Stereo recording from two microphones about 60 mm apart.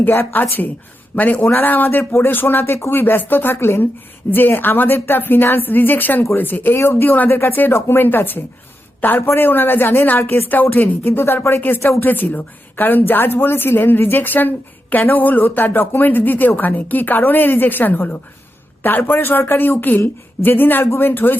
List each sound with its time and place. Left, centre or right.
0.0 s a woman's voice: left
2.9 s a woman's voice: left
7.3 s a woman's voice: left